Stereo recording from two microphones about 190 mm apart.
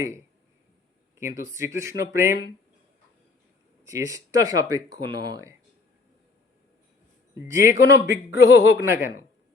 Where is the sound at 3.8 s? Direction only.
15° right (ahead or behind).